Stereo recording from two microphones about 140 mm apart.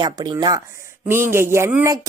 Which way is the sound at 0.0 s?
30° right (ahead or behind).